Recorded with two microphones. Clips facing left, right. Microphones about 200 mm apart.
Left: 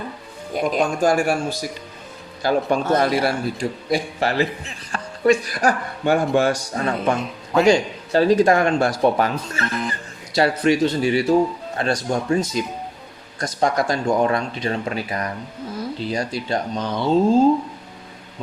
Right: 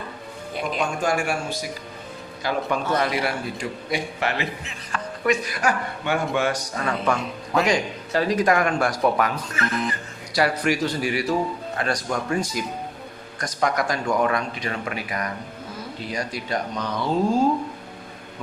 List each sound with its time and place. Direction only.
0.5 s speech: 40° left (ahead or behind)
2.4 s speech: 35° left (ahead or behind)